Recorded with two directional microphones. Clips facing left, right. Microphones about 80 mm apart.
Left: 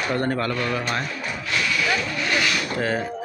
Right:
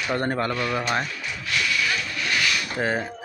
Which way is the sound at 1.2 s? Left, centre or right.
Left.